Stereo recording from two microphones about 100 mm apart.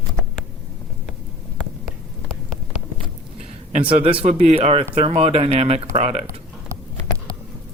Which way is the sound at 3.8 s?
65° right (ahead or behind).